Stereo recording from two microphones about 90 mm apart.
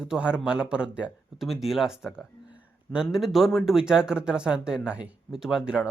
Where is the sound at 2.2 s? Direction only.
10° right (ahead or behind).